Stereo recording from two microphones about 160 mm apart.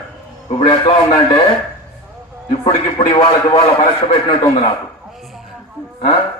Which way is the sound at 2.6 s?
30° left (ahead or behind).